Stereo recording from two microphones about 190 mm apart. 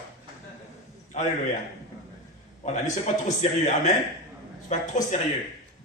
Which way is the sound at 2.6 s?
40° left (ahead or behind).